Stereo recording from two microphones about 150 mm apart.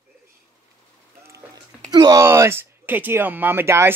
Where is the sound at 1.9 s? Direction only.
25° right (ahead or behind).